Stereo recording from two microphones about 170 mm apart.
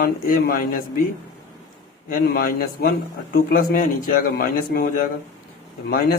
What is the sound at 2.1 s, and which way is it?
A man's voice, 60° left (ahead or behind).